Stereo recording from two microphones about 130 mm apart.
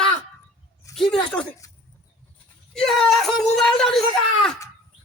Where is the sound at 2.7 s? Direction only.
5° left (ahead or behind).